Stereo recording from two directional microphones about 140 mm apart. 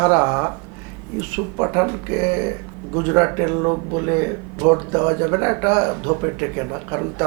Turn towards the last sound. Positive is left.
turn(degrees=-20)  # may be behind; listen again after turning